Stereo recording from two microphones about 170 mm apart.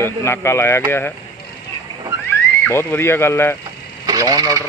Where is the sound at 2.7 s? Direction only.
15° left (ahead or behind).